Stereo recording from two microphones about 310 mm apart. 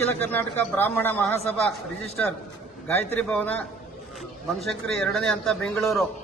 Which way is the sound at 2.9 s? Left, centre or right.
Centre.